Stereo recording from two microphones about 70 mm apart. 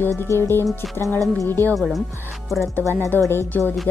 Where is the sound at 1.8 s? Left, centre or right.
Centre.